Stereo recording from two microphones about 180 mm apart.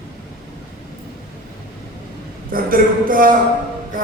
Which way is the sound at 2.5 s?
50° right (ahead or behind).